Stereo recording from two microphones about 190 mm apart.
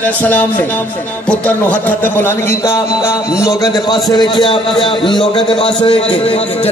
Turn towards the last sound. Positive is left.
turn(degrees=30)  # may be behind; listen again after turning